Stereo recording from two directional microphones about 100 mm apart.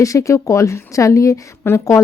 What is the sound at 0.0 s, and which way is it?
A woman's voice, 35° left (ahead or behind).